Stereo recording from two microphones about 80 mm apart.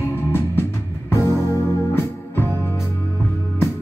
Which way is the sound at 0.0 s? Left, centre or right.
Left.